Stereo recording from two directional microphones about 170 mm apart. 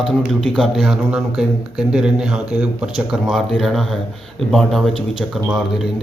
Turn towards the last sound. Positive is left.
turn(degrees=0)  # may be behind; listen again after turning